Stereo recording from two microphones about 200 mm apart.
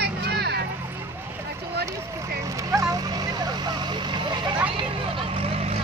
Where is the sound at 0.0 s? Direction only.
55° right (ahead or behind).